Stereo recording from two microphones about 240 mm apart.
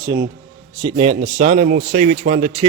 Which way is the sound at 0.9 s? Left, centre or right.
Right.